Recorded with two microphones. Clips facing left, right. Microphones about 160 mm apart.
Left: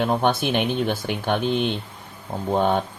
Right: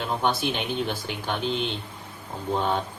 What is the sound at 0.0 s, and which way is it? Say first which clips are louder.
A man's voice: left 5 dB; 55° left (ahead or behind).